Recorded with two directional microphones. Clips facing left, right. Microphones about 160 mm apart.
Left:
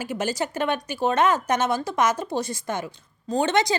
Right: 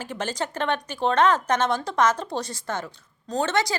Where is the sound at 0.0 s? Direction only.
10° left (ahead or behind).